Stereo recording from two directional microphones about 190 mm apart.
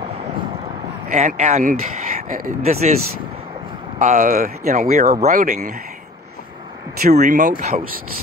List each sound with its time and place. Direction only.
1.1 s speech: 40° right (ahead or behind)
2.6 s speech: 35° right (ahead or behind)
4.0 s speech: 40° right (ahead or behind)
7.1 s speech: 40° right (ahead or behind)